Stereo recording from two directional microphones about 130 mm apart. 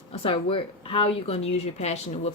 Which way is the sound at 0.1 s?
45° left (ahead or behind).